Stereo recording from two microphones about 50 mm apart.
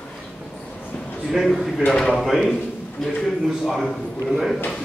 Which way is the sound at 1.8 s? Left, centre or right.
Centre.